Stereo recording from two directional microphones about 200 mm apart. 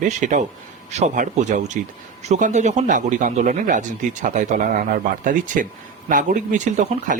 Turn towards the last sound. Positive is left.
turn(degrees=-40)  # may be behind; listen again after turning